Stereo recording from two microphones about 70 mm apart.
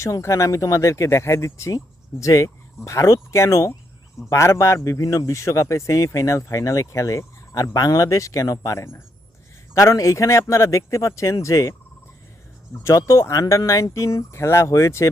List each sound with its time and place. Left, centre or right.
0.0 s speech: left
12.8 s speech: left
13.7 s speech: left